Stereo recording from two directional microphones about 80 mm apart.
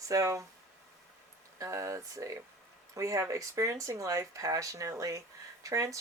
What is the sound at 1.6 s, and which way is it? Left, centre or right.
Speech, right.